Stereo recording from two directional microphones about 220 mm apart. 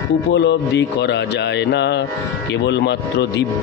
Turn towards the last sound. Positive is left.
turn(degrees=50)  # may be behind; listen again after turning